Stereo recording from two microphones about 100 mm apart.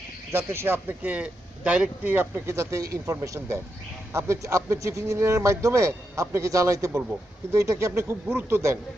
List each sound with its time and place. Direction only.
0.3 s a man's voice: 25° right (ahead or behind)
2.6 s a man's voice: 30° right (ahead or behind)